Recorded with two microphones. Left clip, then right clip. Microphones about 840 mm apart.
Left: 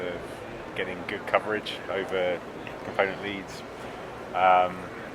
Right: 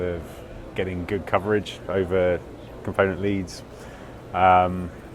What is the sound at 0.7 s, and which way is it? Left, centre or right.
Speech, right.